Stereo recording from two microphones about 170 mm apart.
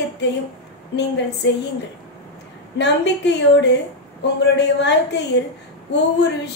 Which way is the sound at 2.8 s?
90° left.